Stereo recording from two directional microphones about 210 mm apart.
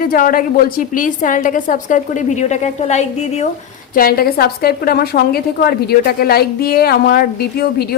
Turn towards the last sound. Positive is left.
turn(degrees=50)  # may be behind; listen again after turning